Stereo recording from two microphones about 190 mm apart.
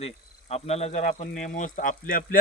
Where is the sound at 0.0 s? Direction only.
35° left (ahead or behind).